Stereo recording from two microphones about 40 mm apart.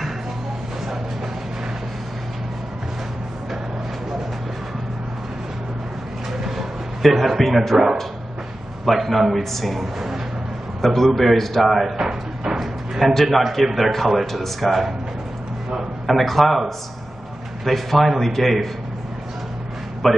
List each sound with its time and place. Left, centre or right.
6.4 s a sound: centre
8.8 s a man's voice: centre
10.8 s a man's voice: centre
12.0 s music: centre
12.5 s a sound: centre
13.7 s a man's voice: centre
16.1 s a man's voice: centre
20.0 s a man's voice: centre